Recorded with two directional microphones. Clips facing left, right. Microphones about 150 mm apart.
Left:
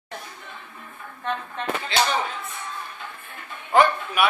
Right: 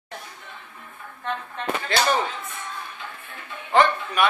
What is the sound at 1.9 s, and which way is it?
Speech, 50° right (ahead or behind).